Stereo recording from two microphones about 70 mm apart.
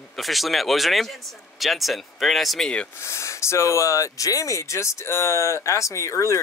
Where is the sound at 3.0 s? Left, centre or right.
Left.